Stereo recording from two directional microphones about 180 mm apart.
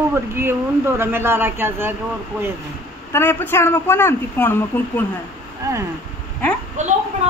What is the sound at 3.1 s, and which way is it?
A man's voice, 10° left (ahead or behind).